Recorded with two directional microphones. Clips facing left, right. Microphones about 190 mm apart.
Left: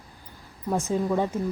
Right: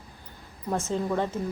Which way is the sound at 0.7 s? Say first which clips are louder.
Left 3 dB; 15° left (ahead or behind).